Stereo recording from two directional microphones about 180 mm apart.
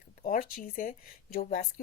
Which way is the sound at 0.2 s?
50° left (ahead or behind).